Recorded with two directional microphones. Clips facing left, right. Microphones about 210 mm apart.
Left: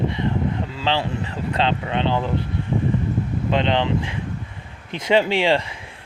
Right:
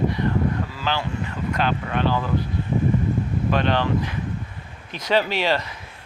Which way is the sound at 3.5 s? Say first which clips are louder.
Left 2 dB; 20° left (ahead or behind).